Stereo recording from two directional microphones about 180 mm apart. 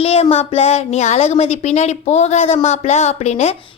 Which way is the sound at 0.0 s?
35° left (ahead or behind).